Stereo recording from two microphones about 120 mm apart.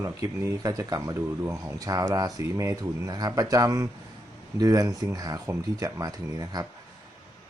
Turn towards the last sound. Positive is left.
turn(degrees=-30)  # may be behind; listen again after turning